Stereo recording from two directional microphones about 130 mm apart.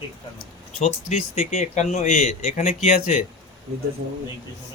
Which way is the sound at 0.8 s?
55° left (ahead or behind).